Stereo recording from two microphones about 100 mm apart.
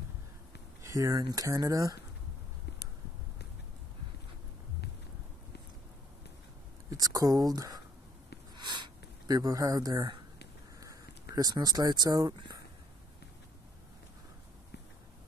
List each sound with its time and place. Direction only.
0.8 s speech: 35° right (ahead or behind)
6.9 s a sound: 35° right (ahead or behind)
10.8 s speech: 35° right (ahead or behind)